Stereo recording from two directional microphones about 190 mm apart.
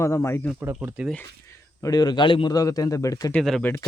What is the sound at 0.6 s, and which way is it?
Speech, 10° right (ahead or behind).